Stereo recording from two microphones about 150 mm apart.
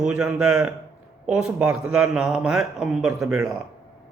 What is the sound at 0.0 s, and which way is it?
Speech, 5° right (ahead or behind).